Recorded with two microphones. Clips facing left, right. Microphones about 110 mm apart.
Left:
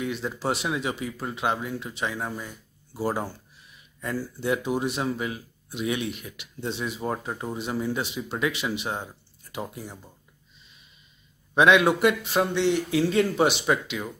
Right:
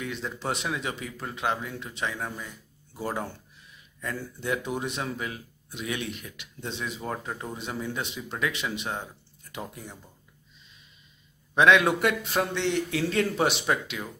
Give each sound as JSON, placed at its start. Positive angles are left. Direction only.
{"t": 0.0, "sound": "speech", "side_deg": 10}
{"t": 4.0, "sound": "speech", "side_deg": 10}
{"t": 7.0, "sound": "speech", "side_deg": 20}
{"t": 11.5, "sound": "a man's voice", "side_deg": 10}